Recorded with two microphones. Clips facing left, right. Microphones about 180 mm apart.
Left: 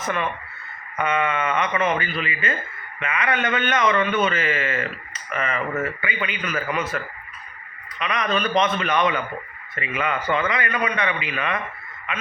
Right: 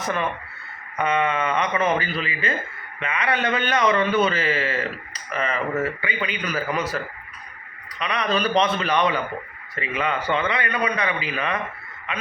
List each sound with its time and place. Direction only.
0.0 s a man's voice: 35° right (ahead or behind)